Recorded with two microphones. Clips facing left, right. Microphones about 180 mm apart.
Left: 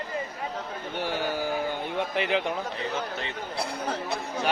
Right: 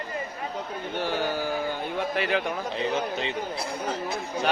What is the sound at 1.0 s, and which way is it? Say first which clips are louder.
A man's voice: right 1 dB; 15° left (ahead or behind).